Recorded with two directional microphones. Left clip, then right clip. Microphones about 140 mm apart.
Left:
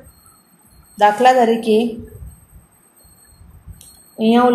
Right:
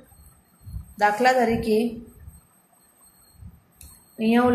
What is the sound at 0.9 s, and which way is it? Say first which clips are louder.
Speech: left 8 dB; 25° left (ahead or behind).